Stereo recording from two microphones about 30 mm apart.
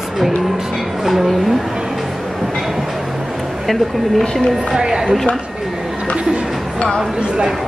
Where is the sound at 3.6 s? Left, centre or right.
Centre.